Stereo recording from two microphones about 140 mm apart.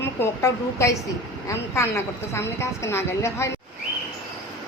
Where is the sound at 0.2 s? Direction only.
20° left (ahead or behind).